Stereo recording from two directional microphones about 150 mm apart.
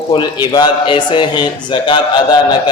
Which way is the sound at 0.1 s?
30° left (ahead or behind).